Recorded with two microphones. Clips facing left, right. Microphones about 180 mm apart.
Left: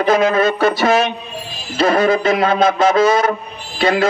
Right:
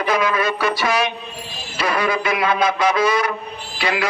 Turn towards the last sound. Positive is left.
turn(degrees=50)  # may be behind; listen again after turning